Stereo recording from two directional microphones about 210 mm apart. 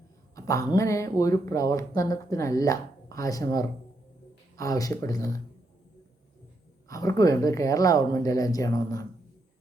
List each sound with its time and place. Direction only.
0.3 s speech: 15° left (ahead or behind)
6.8 s speech: 15° left (ahead or behind)